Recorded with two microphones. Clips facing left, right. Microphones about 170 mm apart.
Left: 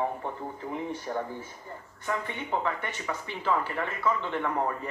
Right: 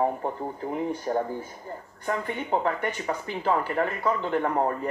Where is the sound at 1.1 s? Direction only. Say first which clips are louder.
Right 6 dB; 40° right (ahead or behind).